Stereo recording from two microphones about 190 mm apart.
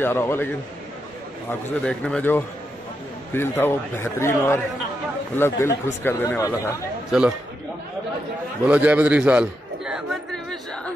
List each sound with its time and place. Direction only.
0.0 s speech: 15° left (ahead or behind)
1.5 s speech: 5° left (ahead or behind)
7.1 s a man's voice: 5° right (ahead or behind)
8.6 s a sound: 10° right (ahead or behind)